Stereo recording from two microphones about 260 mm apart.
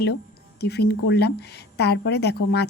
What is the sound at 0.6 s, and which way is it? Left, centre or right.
A woman's voice, left.